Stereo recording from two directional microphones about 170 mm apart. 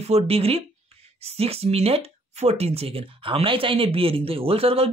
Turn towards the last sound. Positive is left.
turn(degrees=-35)  # may be behind; listen again after turning